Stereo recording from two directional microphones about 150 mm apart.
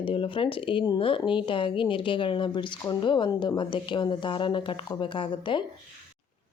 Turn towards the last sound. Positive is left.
turn(degrees=30)  # may be behind; listen again after turning